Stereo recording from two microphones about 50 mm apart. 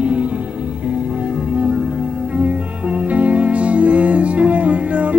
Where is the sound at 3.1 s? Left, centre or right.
Right.